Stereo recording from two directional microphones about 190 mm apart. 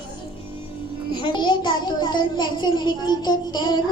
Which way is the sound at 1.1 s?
25° left (ahead or behind).